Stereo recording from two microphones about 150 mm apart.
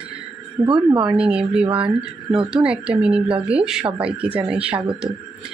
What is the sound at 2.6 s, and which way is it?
A woman's voice, 5° right (ahead or behind).